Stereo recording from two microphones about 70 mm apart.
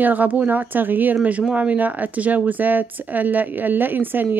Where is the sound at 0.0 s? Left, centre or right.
Right.